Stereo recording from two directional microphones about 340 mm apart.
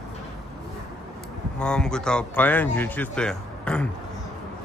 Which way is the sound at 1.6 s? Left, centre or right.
Centre.